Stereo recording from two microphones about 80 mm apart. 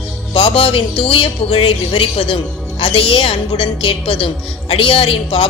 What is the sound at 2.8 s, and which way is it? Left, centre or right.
Speech, left.